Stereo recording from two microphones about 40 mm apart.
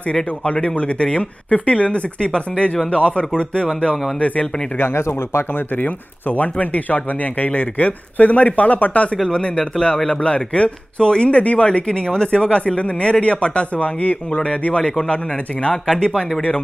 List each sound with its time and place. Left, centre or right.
0.1 s speech: left
4.7 s speech: left
5.8 s speech: left
9.3 s speech: left
15.7 s speech: centre